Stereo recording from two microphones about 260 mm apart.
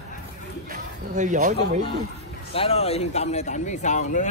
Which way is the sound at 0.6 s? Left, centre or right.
Right.